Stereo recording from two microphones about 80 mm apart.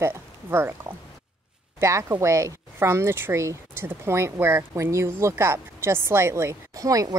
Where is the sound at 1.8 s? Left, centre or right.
Right.